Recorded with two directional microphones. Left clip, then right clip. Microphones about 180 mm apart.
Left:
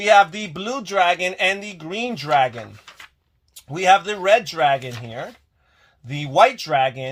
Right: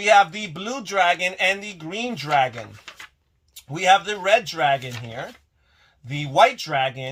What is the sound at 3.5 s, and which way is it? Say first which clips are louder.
A man's voice: left 2 dB; 45° left (ahead or behind).